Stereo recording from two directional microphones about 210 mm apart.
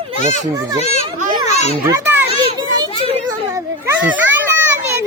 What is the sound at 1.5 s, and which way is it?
Children playing, 30° left (ahead or behind).